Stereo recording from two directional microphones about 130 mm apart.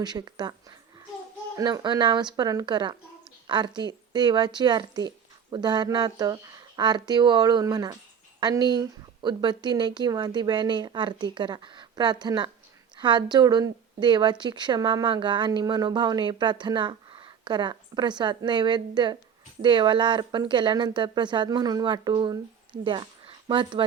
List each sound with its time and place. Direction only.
0.0 s speech: 30° right (ahead or behind)
1.5 s a woman's voice: 30° right (ahead or behind)